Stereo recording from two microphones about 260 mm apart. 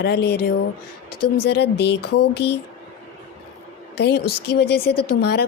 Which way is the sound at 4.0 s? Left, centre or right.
Left.